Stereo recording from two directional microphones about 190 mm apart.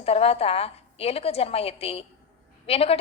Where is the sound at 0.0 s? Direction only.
30° left (ahead or behind).